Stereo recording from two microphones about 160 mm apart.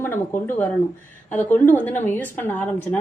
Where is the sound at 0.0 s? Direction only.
15° left (ahead or behind).